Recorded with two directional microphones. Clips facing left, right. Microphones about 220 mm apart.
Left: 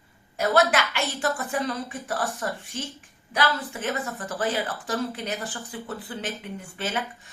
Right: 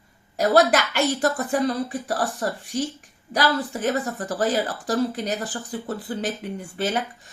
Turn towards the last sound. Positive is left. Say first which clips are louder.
# right 6 dB
turn(degrees=-40)  # may be behind; listen again after turning